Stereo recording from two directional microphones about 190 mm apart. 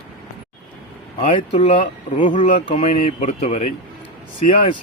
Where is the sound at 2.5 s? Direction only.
30° left (ahead or behind).